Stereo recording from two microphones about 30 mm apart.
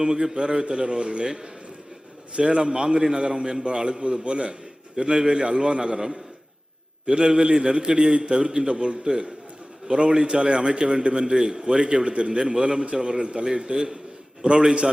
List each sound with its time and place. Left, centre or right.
0.0 s a man's voice: right
7.1 s a man's voice: right